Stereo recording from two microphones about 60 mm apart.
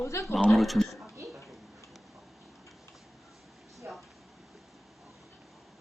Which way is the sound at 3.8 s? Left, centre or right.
Right.